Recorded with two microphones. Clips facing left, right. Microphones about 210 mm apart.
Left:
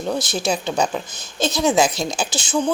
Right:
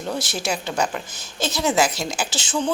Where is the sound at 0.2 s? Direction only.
15° left (ahead or behind).